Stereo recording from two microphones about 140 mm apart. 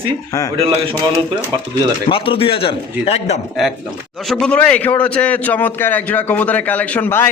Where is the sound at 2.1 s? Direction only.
40° left (ahead or behind).